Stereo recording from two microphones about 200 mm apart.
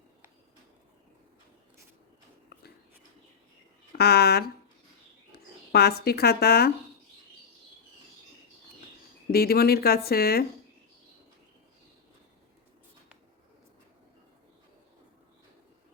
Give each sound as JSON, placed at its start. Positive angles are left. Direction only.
{"t": 3.9, "sound": "speech", "side_deg": 50}
{"t": 9.3, "sound": "speech", "side_deg": 50}